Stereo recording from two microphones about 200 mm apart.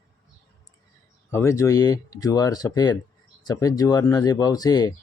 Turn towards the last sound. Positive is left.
turn(degrees=20)  # may be behind; listen again after turning